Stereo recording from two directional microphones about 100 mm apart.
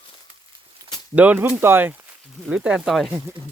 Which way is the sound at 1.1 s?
15° right (ahead or behind).